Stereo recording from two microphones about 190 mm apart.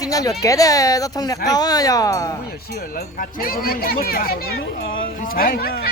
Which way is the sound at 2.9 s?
50° left (ahead or behind).